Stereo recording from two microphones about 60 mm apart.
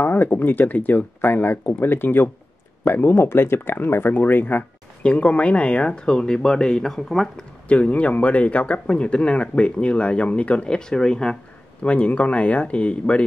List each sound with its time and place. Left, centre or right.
0.0 s speech: left
5.0 s speech: left
7.6 s speech: left
11.8 s speech: left